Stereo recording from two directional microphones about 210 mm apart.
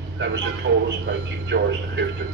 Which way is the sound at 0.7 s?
60° right (ahead or behind).